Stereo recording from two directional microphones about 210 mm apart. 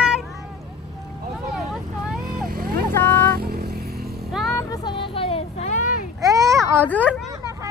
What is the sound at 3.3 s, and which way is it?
Vehicle, 45° right (ahead or behind).